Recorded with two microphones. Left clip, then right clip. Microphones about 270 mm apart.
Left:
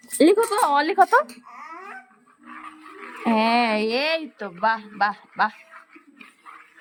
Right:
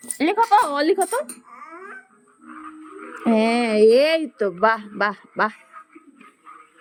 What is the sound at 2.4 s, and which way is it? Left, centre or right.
Wild animals, centre.